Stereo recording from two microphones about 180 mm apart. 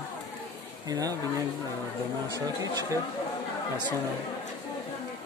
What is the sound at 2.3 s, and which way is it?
Speech, 20° right (ahead or behind).